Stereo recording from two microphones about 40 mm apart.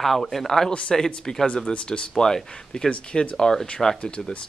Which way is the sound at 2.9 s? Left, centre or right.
Left.